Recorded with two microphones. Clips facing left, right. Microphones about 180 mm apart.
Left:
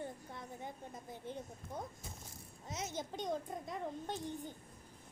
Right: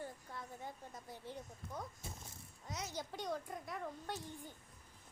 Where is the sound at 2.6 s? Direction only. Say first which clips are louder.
Left 3 dB; 20° left (ahead or behind).